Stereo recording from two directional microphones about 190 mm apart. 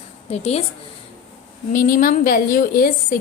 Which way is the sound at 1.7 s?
45° left (ahead or behind).